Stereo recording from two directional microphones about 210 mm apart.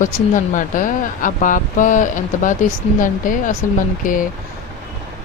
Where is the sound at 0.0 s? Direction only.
40° left (ahead or behind).